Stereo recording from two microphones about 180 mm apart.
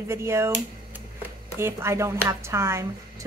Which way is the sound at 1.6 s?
15° right (ahead or behind).